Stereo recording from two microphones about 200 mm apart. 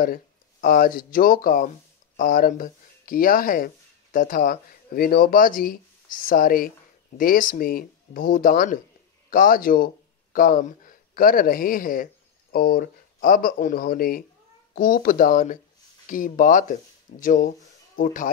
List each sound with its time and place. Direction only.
0.0 s speech: 45° left (ahead or behind)